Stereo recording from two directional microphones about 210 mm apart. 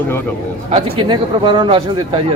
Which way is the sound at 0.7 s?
25° right (ahead or behind).